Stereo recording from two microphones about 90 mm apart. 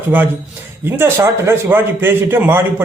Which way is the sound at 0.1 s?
20° right (ahead or behind).